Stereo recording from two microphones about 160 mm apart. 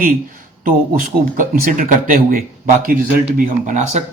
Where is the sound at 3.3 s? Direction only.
50° right (ahead or behind).